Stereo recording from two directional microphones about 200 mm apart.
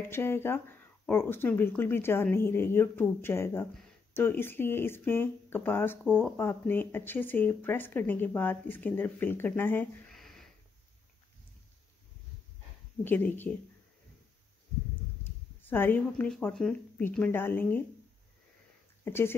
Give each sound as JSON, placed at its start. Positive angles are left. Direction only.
{"t": 0.1, "sound": "speech", "side_deg": 10}
{"t": 13.0, "sound": "speech", "side_deg": 10}
{"t": 15.6, "sound": "speech", "side_deg": 10}
{"t": 19.0, "sound": "speech", "side_deg": 10}